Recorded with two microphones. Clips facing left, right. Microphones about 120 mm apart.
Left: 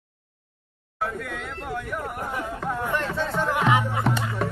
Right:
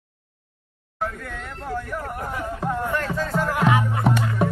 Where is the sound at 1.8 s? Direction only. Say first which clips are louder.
Even; 5° left (ahead or behind).